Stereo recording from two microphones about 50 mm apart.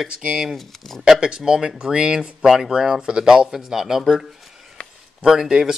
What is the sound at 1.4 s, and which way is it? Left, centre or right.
Speech, centre.